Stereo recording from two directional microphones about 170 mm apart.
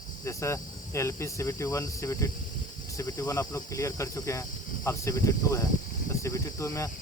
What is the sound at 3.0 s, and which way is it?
Cricket, 20° left (ahead or behind).